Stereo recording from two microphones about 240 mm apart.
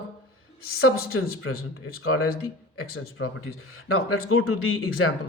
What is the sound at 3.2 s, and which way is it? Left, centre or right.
Speech, left.